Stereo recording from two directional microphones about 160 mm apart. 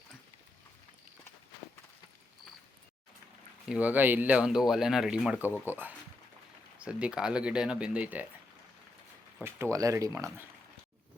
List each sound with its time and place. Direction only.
3.7 s speech: 10° right (ahead or behind)
9.4 s speech: 15° right (ahead or behind)